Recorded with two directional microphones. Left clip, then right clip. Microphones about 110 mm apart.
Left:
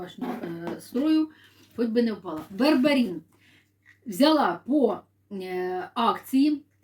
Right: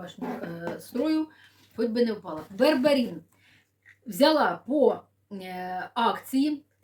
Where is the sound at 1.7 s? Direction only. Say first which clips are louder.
Even; 35° right (ahead or behind).